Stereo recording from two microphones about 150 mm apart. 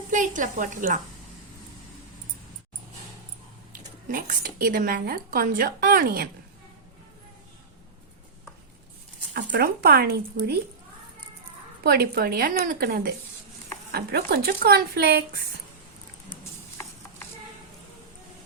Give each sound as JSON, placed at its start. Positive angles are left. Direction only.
{"t": 0.1, "sound": "a woman's voice", "side_deg": -60}
{"t": 4.1, "sound": "a woman's voice", "side_deg": -65}
{"t": 9.3, "sound": "speech", "side_deg": -85}
{"t": 11.8, "sound": "a woman's voice", "side_deg": -90}
{"t": 13.9, "sound": "speech", "side_deg": -90}
{"t": 16.4, "sound": "a sound", "side_deg": 15}